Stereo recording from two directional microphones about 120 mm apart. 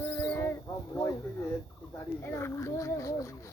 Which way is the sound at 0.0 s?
15° left (ahead or behind).